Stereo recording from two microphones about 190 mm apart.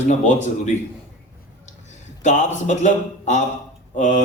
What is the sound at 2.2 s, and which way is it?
Speech, 40° left (ahead or behind).